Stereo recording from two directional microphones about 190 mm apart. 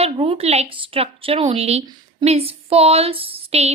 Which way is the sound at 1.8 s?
20° right (ahead or behind).